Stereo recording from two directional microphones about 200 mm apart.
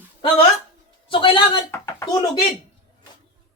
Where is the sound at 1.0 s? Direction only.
25° left (ahead or behind).